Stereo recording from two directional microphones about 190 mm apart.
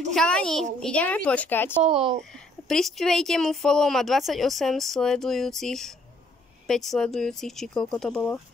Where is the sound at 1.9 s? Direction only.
30° right (ahead or behind).